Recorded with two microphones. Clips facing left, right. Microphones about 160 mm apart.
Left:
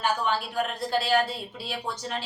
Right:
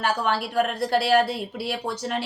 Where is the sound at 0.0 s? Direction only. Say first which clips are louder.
Right 2 dB; 70° right (ahead or behind).